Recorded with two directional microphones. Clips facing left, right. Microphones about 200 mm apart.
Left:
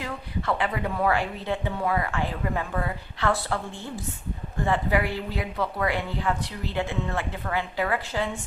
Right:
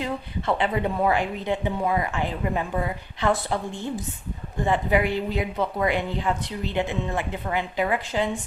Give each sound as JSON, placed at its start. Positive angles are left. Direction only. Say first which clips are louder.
{"t": 0.0, "sound": "a woman's voice", "louder": "right 3 dB", "side_deg": -25}